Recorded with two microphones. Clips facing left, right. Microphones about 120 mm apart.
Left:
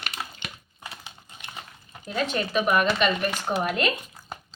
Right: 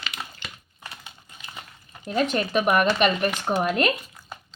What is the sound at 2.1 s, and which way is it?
Speech, 50° right (ahead or behind).